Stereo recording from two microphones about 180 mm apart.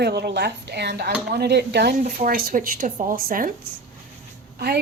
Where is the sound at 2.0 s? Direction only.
50° right (ahead or behind).